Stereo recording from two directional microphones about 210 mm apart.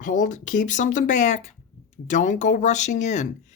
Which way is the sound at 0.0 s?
40° left (ahead or behind).